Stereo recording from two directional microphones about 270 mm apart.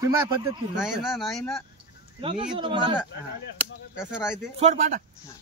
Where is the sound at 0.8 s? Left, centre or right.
Centre.